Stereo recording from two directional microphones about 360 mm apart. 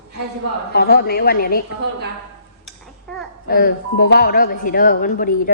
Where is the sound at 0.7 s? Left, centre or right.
Left.